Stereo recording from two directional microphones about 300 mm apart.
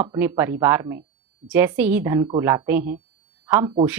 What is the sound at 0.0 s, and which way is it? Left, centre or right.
A woman's voice, centre.